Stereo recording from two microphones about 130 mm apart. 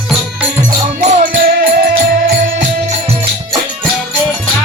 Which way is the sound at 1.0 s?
65° right (ahead or behind).